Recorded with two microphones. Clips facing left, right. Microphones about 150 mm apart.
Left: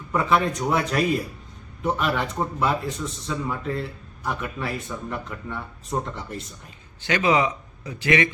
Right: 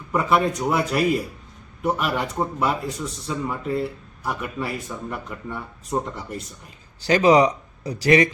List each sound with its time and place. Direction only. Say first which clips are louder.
0.1 s a man's voice: right 1 dB; 10° right (ahead or behind)
7.0 s speech: right 5 dB; 35° right (ahead or behind)